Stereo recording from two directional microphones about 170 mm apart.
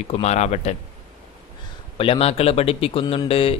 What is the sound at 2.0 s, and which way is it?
Speech, 35° left (ahead or behind).